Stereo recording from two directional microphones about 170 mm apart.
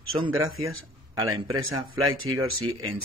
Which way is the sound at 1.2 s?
30° right (ahead or behind).